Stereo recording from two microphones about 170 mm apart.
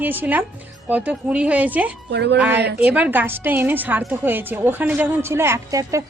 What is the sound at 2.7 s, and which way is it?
A woman's voice, 10° right (ahead or behind).